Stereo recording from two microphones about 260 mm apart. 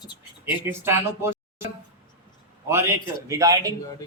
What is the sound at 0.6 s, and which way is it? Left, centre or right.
Speech, centre.